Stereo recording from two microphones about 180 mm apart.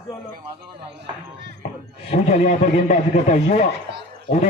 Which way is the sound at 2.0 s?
35° left (ahead or behind).